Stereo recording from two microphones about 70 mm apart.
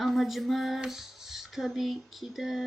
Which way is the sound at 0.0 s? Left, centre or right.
Centre.